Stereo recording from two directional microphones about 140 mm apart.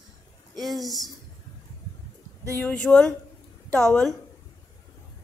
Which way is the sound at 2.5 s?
10° left (ahead or behind).